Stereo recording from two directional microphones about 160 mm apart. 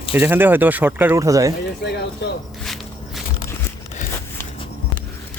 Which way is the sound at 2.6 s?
Centre (ahead or behind).